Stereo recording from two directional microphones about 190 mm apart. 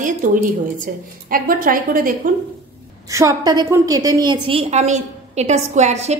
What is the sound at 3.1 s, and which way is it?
A woman's voice, 20° right (ahead or behind).